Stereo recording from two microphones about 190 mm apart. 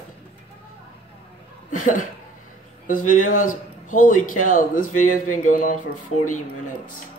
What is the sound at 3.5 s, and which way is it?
Speech, 45° left (ahead or behind).